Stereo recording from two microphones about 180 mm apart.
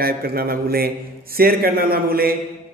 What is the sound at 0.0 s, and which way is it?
A man's voice, 55° right (ahead or behind).